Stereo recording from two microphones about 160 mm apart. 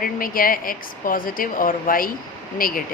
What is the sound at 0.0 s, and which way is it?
Speech, 60° left (ahead or behind).